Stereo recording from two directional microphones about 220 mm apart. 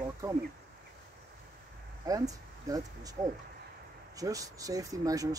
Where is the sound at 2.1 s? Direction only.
15° right (ahead or behind).